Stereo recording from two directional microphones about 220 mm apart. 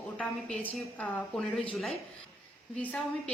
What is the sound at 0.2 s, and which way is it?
A woman's voice, 5° left (ahead or behind).